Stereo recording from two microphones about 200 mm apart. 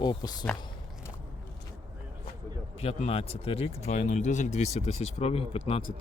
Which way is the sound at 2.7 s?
30° left (ahead or behind).